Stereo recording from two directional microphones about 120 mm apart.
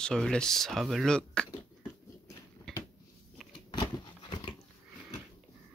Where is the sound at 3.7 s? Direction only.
35° left (ahead or behind).